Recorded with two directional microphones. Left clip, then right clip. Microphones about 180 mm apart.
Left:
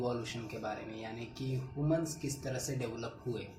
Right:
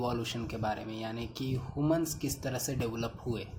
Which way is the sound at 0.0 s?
65° right (ahead or behind).